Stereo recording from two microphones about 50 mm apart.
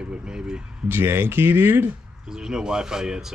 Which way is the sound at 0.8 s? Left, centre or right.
Right.